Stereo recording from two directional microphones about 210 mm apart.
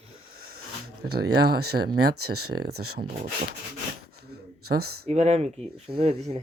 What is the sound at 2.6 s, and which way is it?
Speech, 50° right (ahead or behind).